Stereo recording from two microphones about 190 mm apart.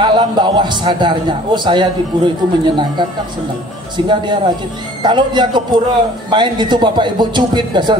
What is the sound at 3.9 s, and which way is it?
A woman's voice, 25° right (ahead or behind).